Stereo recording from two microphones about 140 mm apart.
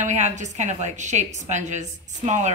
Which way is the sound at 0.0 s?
60° right (ahead or behind).